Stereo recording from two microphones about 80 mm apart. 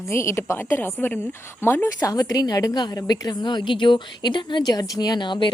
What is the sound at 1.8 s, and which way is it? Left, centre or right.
A woman's voice, left.